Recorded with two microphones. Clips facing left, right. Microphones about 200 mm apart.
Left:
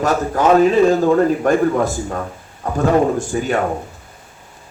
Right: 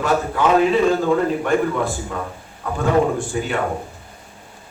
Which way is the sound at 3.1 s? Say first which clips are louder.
Left 4 dB; 40° left (ahead or behind).